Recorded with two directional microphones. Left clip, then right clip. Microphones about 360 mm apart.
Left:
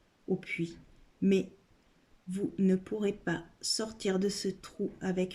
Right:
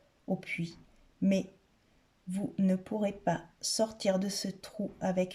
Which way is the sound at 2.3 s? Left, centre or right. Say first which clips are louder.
Left 2 dB; centre.